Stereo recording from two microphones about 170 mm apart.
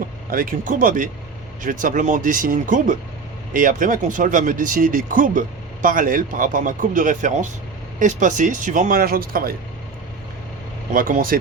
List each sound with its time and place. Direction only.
0.3 s speech: 55° right (ahead or behind)
10.9 s speech: 55° right (ahead or behind)